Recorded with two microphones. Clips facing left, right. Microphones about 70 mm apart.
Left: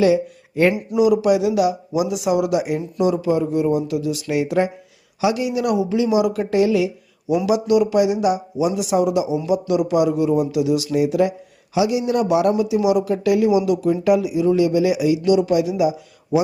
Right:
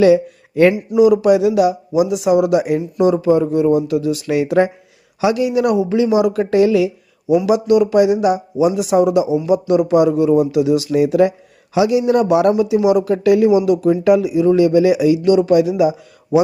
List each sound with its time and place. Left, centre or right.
0.0 s speech: right
0.9 s speech: right
2.0 s speech: right
7.4 s speech: right